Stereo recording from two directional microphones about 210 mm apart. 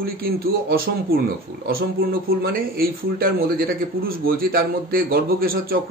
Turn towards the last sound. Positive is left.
turn(degrees=-45)  # may be behind; listen again after turning